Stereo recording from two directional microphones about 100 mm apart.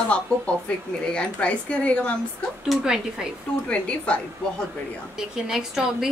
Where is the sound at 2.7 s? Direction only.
5° right (ahead or behind).